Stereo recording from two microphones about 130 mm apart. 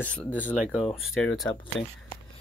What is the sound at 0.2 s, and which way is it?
Speech, 15° left (ahead or behind).